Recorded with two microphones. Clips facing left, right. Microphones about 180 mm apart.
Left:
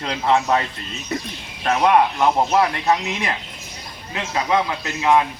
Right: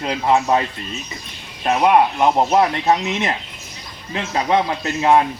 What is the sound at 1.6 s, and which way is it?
Speech, 20° right (ahead or behind).